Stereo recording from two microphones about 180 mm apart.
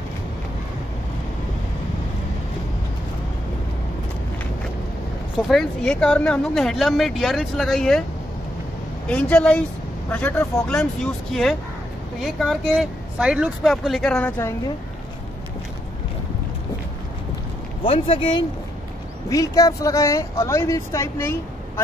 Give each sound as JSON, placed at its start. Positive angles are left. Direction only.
{"t": 5.5, "sound": "speech", "side_deg": 5}
{"t": 9.1, "sound": "speech", "side_deg": 5}
{"t": 17.8, "sound": "speech", "side_deg": 30}